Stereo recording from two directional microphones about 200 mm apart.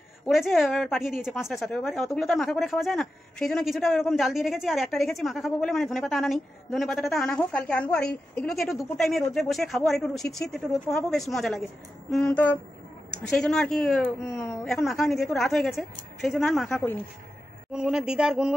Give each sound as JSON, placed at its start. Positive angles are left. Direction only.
{"t": 0.3, "sound": "a woman's voice", "side_deg": 0}
{"t": 14.7, "sound": "a woman's voice", "side_deg": 0}
{"t": 17.7, "sound": "a woman's voice", "side_deg": -5}